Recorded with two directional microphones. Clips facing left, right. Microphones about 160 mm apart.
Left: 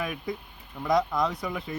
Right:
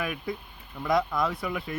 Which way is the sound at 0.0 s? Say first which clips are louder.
Even; 25° left (ahead or behind).